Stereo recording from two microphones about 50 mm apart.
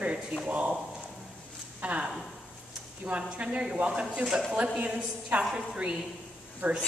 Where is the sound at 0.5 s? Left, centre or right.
Right.